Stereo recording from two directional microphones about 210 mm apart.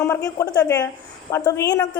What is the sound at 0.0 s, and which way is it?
Speech, 10° left (ahead or behind).